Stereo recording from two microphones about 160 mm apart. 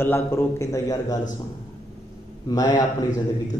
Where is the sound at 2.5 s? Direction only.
25° left (ahead or behind).